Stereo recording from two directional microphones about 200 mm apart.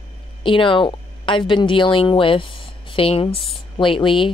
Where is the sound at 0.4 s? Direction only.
25° left (ahead or behind).